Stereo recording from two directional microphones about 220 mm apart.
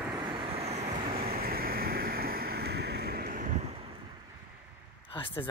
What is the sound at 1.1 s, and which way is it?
Vehicle, 45° right (ahead or behind).